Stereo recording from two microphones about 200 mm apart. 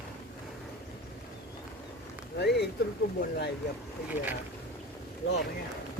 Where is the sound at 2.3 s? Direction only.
55° left (ahead or behind).